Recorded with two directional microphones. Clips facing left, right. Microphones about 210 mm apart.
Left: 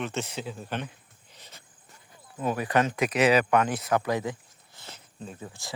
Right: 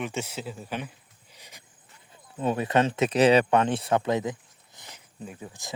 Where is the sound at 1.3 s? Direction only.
10° right (ahead or behind).